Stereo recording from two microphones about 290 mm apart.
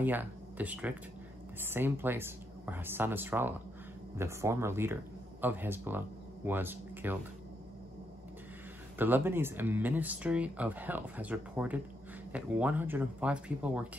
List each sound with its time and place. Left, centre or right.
0.0 s speech: centre
8.9 s speech: centre